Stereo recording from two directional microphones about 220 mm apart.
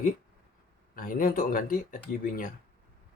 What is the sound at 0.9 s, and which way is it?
Speech, 40° left (ahead or behind).